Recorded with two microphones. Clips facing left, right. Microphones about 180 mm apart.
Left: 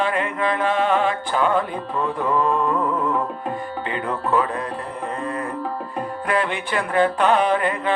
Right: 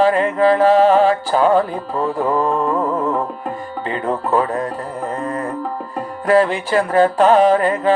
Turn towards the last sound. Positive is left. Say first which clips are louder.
# right 7 dB
turn(degrees=-35)  # may be behind; listen again after turning